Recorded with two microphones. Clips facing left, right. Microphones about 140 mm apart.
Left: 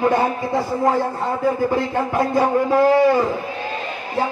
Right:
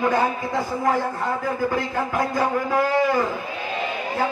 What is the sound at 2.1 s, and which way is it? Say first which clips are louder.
Speech: left 5 dB; 30° left (ahead or behind).